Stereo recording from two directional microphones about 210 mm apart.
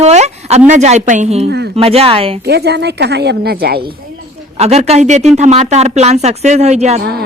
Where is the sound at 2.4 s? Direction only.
50° right (ahead or behind).